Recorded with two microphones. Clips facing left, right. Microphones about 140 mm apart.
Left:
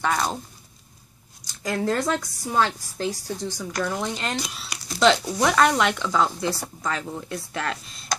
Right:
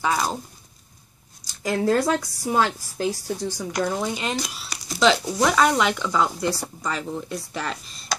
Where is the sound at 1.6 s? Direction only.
5° right (ahead or behind).